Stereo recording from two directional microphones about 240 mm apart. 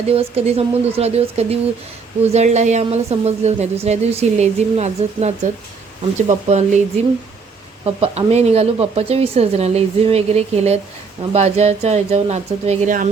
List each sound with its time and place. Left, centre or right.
0.1 s speech: right
7.9 s speech: right